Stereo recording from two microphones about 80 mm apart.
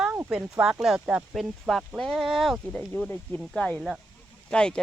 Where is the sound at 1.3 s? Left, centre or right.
Centre.